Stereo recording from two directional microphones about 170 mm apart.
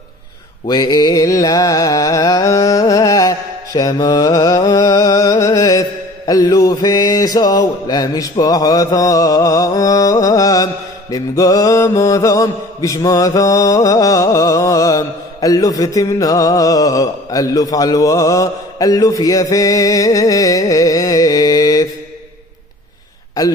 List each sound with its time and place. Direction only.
0.7 s mantra: 25° left (ahead or behind)